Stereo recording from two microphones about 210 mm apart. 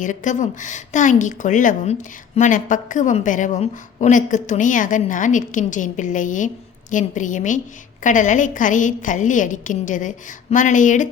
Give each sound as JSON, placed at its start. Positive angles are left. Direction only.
{"t": 0.0, "sound": "a woman's voice", "side_deg": 35}